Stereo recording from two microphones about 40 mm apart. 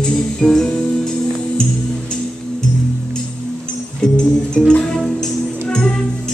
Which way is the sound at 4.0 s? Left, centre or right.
Centre.